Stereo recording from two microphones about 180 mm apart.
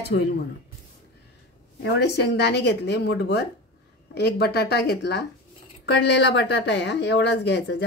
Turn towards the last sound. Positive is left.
turn(degrees=70)  # may be behind; listen again after turning